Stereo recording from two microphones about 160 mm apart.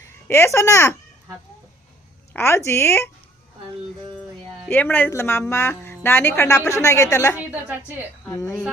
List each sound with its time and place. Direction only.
0.0 s speech: 15° left (ahead or behind)
2.3 s a woman's voice: 15° left (ahead or behind)
4.7 s a woman's voice: 10° left (ahead or behind)
7.3 s a woman's voice: 10° right (ahead or behind)
8.3 s a woman's voice: 20° left (ahead or behind)